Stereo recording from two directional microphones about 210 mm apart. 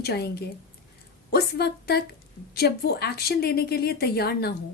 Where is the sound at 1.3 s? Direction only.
50° left (ahead or behind).